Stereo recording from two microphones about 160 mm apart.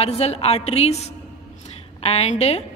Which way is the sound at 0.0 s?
40° left (ahead or behind).